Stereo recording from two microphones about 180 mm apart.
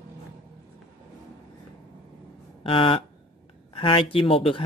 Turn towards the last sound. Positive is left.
turn(degrees=30)  # may be behind; listen again after turning